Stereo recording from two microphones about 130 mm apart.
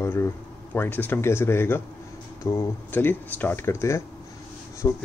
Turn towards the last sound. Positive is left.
turn(degrees=25)  # may be behind; listen again after turning